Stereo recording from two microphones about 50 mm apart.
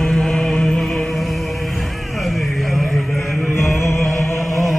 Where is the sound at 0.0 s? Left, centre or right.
Centre.